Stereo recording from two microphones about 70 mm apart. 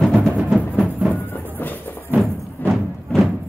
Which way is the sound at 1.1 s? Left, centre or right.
Left.